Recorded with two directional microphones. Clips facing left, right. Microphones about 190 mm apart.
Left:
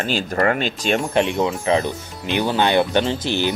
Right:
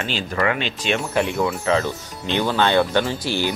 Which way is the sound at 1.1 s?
20° left (ahead or behind).